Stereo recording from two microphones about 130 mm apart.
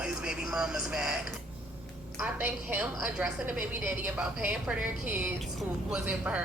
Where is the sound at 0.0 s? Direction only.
5° right (ahead or behind).